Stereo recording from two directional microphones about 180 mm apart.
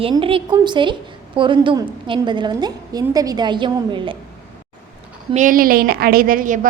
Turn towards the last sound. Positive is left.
turn(degrees=-50)  # may be behind; listen again after turning